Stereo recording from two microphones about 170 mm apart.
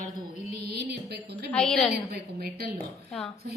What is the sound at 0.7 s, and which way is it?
Speech, 75° right (ahead or behind).